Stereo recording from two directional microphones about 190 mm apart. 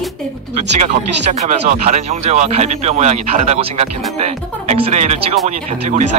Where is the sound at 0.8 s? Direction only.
40° right (ahead or behind).